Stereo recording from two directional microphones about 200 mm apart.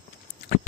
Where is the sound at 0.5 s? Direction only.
50° left (ahead or behind).